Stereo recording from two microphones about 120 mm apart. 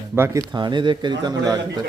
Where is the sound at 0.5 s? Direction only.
40° right (ahead or behind).